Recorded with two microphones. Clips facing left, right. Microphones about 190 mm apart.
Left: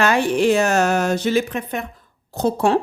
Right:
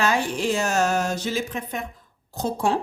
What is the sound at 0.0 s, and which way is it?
A woman's voice, 65° left (ahead or behind).